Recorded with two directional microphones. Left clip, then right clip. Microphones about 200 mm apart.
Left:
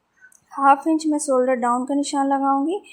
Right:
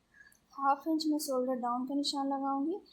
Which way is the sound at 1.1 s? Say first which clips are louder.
Left 15 dB; 45° left (ahead or behind).